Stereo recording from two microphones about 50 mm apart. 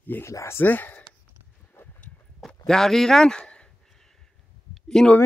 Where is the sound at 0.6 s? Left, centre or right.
Left.